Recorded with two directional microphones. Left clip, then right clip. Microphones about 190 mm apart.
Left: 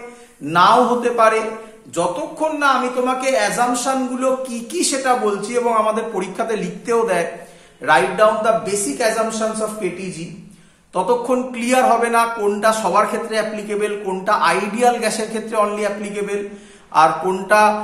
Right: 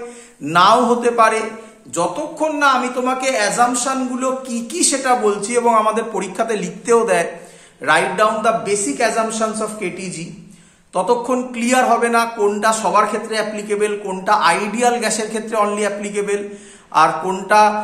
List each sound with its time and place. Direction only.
0.5 s a man's voice: 30° right (ahead or behind)